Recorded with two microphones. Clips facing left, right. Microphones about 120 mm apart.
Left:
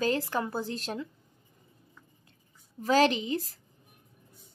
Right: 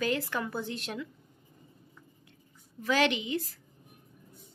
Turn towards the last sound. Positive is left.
turn(degrees=35)  # may be behind; listen again after turning